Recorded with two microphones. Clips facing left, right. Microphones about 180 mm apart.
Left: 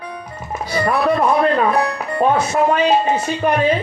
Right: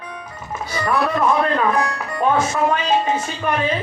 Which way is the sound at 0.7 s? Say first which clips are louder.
Left 3 dB; 35° left (ahead or behind).